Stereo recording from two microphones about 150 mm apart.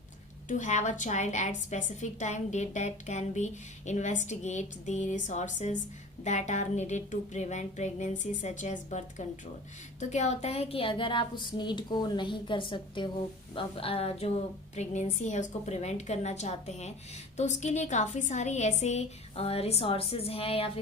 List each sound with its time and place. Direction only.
0.4 s a woman's voice: 55° left (ahead or behind); by 20.7 s 40° left (ahead or behind)